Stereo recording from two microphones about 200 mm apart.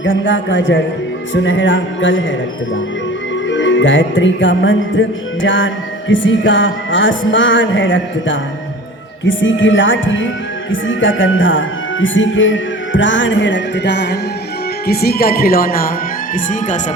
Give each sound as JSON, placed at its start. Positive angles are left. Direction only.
{"t": 0.0, "sound": "music", "side_deg": 70}
{"t": 3.5, "sound": "music", "side_deg": 70}
{"t": 14.8, "sound": "speech", "side_deg": 50}